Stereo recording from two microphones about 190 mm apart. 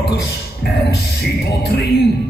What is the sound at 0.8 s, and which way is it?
A man's voice, 60° left (ahead or behind).